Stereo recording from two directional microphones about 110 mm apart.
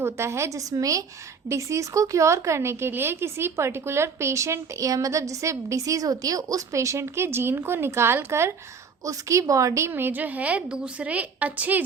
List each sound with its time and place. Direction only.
0.0 s a woman's voice: 25° right (ahead or behind)